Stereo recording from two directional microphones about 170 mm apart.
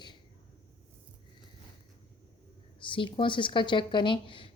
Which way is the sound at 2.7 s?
30° left (ahead or behind).